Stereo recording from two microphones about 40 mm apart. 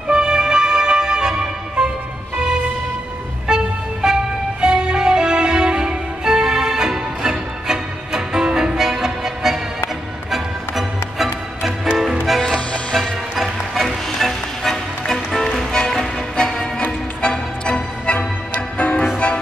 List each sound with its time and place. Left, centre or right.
0.1 s music: centre
12.9 s music: centre; by 19.0 s left